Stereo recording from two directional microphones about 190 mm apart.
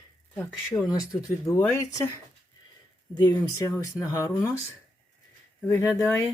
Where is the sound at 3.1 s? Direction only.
15° left (ahead or behind).